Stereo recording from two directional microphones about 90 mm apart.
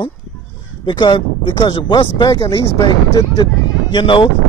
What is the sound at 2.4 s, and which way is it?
Speech, 35° left (ahead or behind).